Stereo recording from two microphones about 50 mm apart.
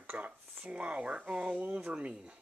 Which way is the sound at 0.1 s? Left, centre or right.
Right.